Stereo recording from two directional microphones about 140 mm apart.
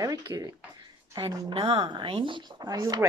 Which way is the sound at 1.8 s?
35° right (ahead or behind).